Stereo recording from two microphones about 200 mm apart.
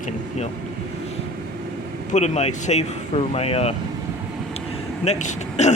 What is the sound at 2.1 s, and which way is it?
Speech, 35° left (ahead or behind).